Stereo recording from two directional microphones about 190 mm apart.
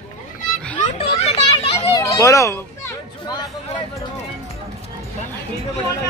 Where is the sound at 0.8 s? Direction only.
30° left (ahead or behind).